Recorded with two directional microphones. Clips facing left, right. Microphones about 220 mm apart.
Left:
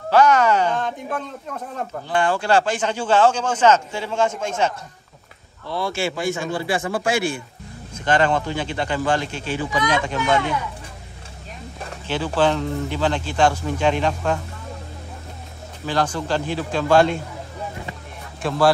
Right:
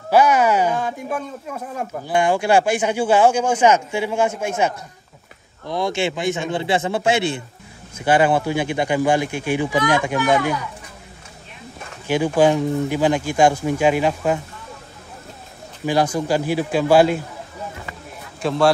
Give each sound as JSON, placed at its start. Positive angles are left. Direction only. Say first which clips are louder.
{"t": 0.1, "sound": "a man's voice", "louder": "right 1 dB", "side_deg": -10}
{"t": 7.9, "sound": "speech", "louder": "right 3 dB", "side_deg": -10}
{"t": 12.1, "sound": "speech", "louder": "right 4 dB", "side_deg": -15}
{"t": 15.8, "sound": "speech", "louder": "right 4 dB", "side_deg": -10}
{"t": 18.4, "sound": "speech", "louder": "right 1 dB", "side_deg": 0}